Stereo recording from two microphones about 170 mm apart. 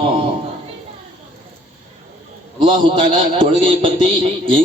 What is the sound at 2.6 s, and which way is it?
A man's voice, 30° right (ahead or behind).